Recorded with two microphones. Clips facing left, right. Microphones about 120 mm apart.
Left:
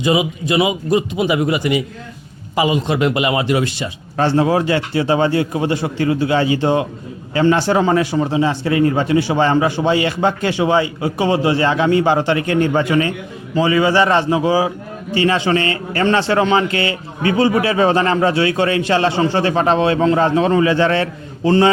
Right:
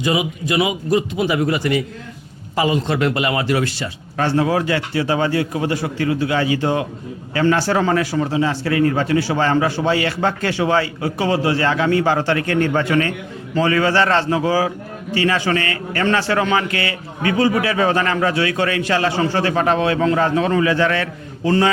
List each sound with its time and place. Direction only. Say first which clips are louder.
0.0 s a man's voice: left 3 dB; 20° left (ahead or behind)